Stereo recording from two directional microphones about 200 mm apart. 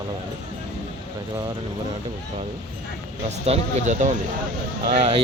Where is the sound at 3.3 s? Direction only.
35° right (ahead or behind).